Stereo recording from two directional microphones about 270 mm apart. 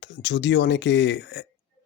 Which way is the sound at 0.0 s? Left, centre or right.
Left.